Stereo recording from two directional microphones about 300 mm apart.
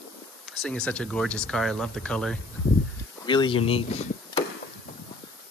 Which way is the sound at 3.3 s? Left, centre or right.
Centre.